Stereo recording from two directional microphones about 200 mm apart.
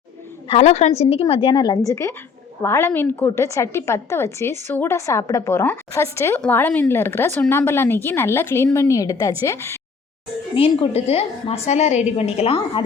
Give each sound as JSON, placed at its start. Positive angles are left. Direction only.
{"t": 0.4, "sound": "a woman's voice", "side_deg": 30}
{"t": 10.5, "sound": "a woman's voice", "side_deg": 25}